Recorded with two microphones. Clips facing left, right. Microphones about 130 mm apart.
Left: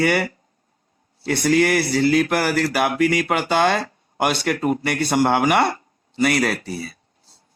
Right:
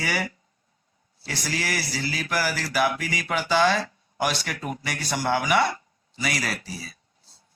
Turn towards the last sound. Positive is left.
turn(degrees=55)  # may be behind; listen again after turning